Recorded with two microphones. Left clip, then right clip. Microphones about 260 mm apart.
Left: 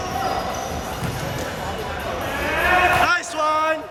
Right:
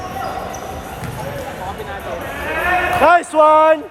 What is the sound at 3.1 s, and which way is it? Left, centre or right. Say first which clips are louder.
Speech: right 10 dB; right.